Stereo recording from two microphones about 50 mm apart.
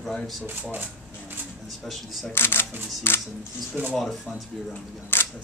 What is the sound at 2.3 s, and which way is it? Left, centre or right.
Speech, left.